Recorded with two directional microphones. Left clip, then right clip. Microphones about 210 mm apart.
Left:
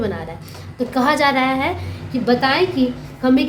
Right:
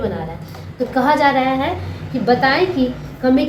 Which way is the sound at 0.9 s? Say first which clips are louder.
Right 2 dB; 45° left (ahead or behind).